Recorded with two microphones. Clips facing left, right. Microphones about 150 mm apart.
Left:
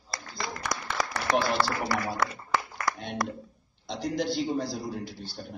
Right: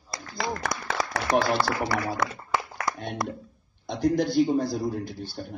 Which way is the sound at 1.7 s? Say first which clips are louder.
Right 2 dB; 20° right (ahead or behind).